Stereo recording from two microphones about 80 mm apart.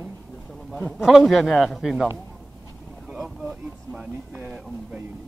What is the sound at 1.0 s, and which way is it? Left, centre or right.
A man's voice, centre.